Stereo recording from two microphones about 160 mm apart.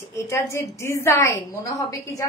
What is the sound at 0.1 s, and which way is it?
A woman's voice, 20° left (ahead or behind).